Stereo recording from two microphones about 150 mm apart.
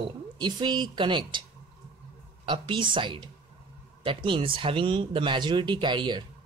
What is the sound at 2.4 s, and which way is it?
Speech, 35° right (ahead or behind).